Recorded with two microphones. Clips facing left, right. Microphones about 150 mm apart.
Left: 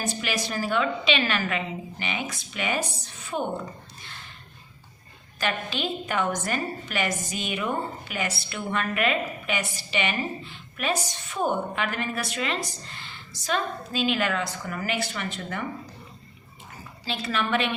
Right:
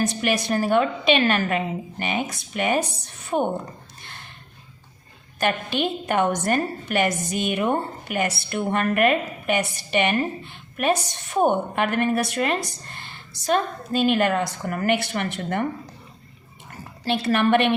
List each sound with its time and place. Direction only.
0.0 s a woman's voice: 60° right (ahead or behind)
5.4 s a woman's voice: 55° right (ahead or behind)
17.1 s a woman's voice: 60° right (ahead or behind)